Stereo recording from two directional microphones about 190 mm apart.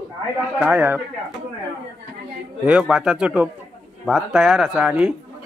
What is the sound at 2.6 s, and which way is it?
Speech, 5° right (ahead or behind).